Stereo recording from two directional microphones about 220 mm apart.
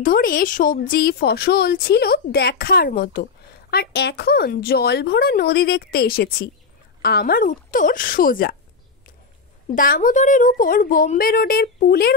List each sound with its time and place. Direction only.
0.0 s a woman's voice: 40° left (ahead or behind)
9.8 s a woman's voice: 40° left (ahead or behind)